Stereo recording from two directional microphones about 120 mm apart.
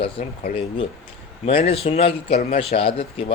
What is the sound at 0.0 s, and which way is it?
Speech, 45° left (ahead or behind).